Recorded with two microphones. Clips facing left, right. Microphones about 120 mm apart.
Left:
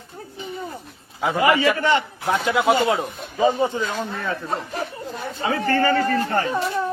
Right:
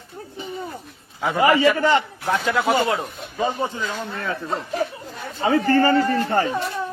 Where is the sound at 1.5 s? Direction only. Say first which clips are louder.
Right 2 dB; 30° right (ahead or behind).